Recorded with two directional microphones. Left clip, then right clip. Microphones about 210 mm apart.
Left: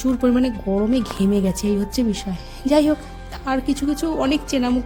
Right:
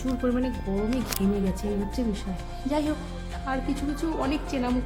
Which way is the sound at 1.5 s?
45° left (ahead or behind).